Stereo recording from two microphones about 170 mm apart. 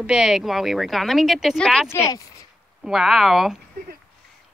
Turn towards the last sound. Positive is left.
turn(degrees=0)  # may be behind; listen again after turning